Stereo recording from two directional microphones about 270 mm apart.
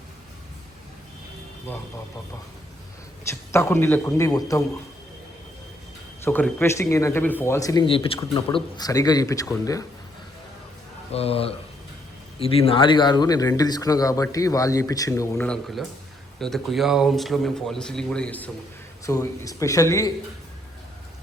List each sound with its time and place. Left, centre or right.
3.2 s a man's voice: centre
6.2 s a man's voice: centre
11.1 s a man's voice: left